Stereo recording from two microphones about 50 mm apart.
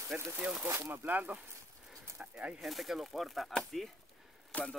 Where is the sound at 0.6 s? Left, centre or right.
Right.